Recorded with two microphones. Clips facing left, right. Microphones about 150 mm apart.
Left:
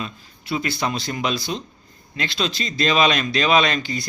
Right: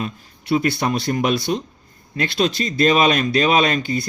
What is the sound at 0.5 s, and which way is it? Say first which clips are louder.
Speech: right 5 dB; 45° right (ahead or behind).